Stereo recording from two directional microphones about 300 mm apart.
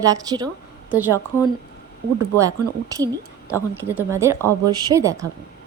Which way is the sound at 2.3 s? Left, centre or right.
Centre.